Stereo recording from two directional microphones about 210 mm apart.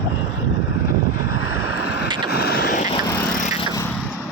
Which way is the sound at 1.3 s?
85° left.